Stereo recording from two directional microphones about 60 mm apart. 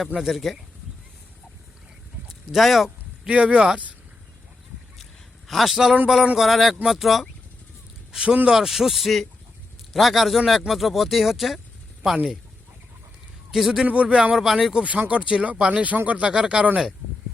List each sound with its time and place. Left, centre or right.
0.2 s speech: centre
2.2 s speech: centre
3.2 s speech: centre
5.5 s speech: centre
8.1 s speech: centre
13.5 s speech: centre
13.8 s speech: right
14.3 s speech: centre
14.8 s speech: right